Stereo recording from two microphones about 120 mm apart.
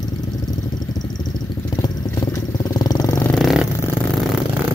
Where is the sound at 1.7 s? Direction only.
35° left (ahead or behind).